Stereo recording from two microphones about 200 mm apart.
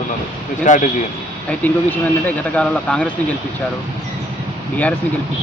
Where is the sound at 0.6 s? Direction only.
40° left (ahead or behind).